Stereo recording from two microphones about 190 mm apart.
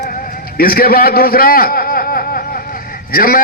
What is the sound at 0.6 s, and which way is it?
A man's voice, 50° left (ahead or behind).